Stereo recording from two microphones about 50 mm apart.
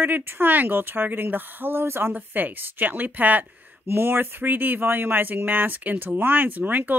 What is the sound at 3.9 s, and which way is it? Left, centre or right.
Speech, right.